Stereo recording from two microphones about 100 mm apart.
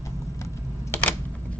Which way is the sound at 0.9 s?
25° left (ahead or behind).